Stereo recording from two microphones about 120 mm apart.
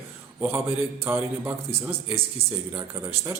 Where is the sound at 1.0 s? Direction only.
20° right (ahead or behind).